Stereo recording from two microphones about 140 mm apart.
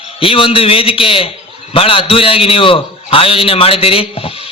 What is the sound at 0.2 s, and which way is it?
A man's voice, 40° left (ahead or behind).